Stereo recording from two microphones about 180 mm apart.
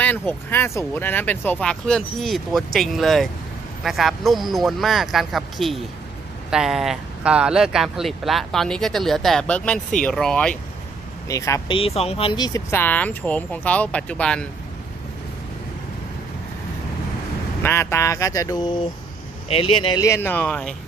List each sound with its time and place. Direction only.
0.0 s speech: 10° left (ahead or behind)
11.3 s speech: 15° left (ahead or behind)
11.7 s speech: 30° left (ahead or behind); by 14.4 s 5° left (ahead or behind)
17.6 s speech: 15° left (ahead or behind)